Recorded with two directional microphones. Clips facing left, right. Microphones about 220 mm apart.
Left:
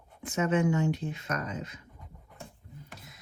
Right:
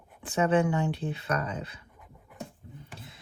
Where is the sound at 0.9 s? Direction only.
35° right (ahead or behind).